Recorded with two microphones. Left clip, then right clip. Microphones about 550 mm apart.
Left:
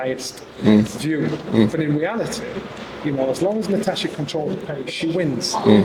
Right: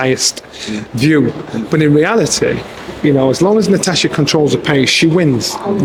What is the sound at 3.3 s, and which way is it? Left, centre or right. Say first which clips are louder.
Speech: right 9 dB; right.